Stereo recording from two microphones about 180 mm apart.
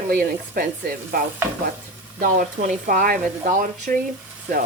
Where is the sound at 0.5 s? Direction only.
55° right (ahead or behind).